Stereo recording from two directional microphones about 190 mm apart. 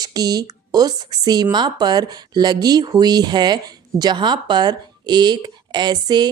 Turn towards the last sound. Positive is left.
turn(degrees=-20)  # may be behind; listen again after turning